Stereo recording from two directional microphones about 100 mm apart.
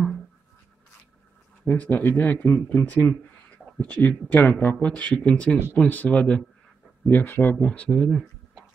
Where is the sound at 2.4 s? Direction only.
5° left (ahead or behind).